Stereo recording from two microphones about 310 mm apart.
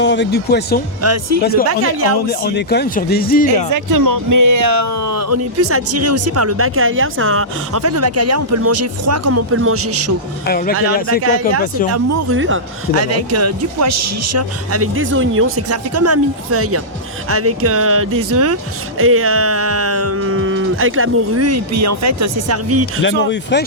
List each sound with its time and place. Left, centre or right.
0.0 s speech: left
1.0 s speech: right
1.4 s speech: left
1.6 s speech: right
2.3 s speech: left
3.7 s speech: right
10.4 s speech: left
11.9 s speech: right
12.4 s speech: right
23.0 s speech: left